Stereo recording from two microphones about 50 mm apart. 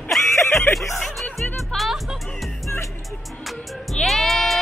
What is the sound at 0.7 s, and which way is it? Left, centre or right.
Speech, centre.